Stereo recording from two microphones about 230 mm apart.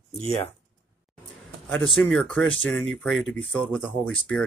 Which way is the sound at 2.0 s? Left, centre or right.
Centre.